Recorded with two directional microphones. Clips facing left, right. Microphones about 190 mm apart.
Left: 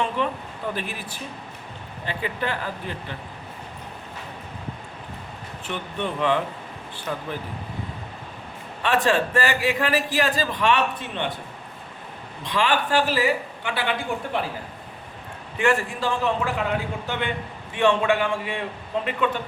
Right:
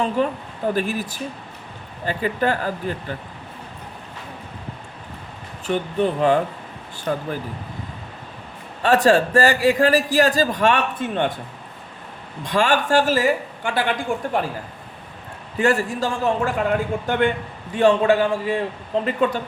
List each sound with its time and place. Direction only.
0.2 s a man's voice: 40° right (ahead or behind)
5.6 s a man's voice: 40° right (ahead or behind)
8.8 s a man's voice: 40° right (ahead or behind)
12.4 s a man's voice: 45° right (ahead or behind)
15.5 s a man's voice: 40° right (ahead or behind)
17.7 s a man's voice: 40° right (ahead or behind)